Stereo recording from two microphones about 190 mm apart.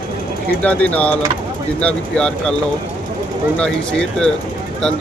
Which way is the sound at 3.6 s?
5° left (ahead or behind).